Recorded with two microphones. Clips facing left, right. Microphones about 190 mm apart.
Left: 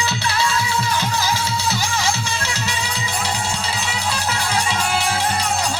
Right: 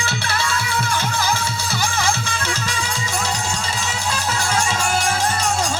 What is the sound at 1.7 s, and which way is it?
Music, 50° right (ahead or behind).